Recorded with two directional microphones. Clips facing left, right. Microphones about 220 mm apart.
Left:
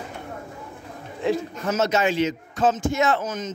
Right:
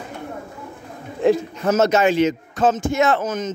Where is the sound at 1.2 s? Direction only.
45° right (ahead or behind).